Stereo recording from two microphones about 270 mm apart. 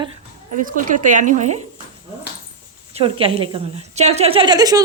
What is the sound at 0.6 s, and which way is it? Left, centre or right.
Speech, right.